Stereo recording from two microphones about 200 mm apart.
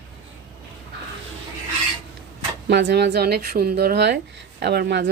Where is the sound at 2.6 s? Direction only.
55° right (ahead or behind).